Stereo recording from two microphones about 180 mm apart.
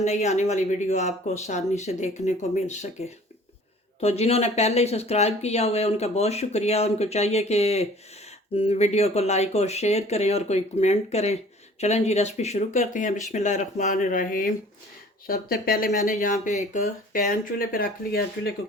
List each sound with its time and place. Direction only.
0.0 s speech: 40° left (ahead or behind); by 18.5 s 60° left (ahead or behind)